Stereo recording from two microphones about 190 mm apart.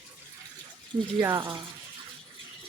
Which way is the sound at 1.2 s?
15° right (ahead or behind).